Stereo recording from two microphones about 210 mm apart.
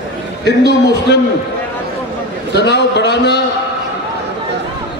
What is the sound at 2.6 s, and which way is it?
Speech, 55° left (ahead or behind).